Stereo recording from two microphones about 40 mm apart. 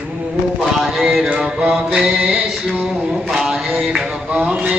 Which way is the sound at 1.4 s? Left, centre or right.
Centre.